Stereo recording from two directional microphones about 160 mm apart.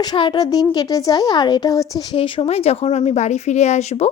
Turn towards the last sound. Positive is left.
turn(degrees=45)  # may be behind; listen again after turning